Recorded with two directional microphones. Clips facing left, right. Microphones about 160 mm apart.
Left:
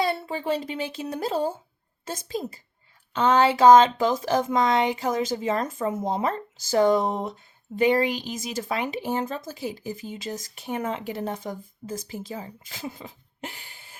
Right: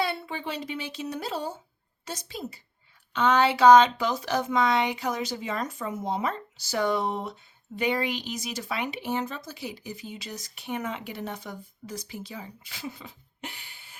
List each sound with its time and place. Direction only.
0.0 s speech: 40° left (ahead or behind)